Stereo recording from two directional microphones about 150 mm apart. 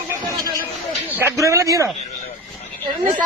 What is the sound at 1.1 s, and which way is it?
Speech, 15° right (ahead or behind).